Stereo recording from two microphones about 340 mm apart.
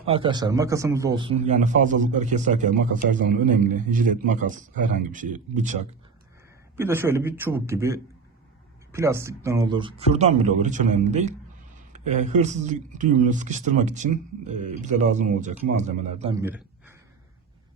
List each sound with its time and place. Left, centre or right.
0.0 s speech: centre
6.7 s speech: centre
16.4 s a sound: centre